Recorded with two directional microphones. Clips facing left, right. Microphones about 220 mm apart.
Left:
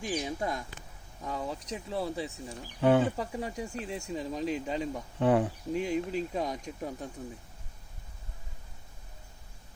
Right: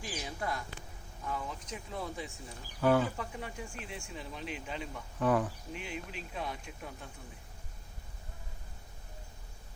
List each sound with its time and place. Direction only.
0.0 s speech: 20° left (ahead or behind)
1.2 s speech: 35° left (ahead or behind)
5.2 s speech: 25° left (ahead or behind)
5.7 s speech: 40° left (ahead or behind)